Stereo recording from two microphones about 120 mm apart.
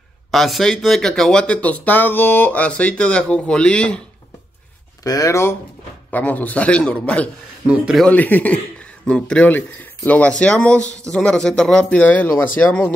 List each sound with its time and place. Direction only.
0.3 s speech: centre (ahead or behind)
5.0 s speech: 30° left (ahead or behind); by 7.2 s 10° left (ahead or behind)
7.6 s speech: 10° right (ahead or behind)
8.0 s speech: 15° left (ahead or behind)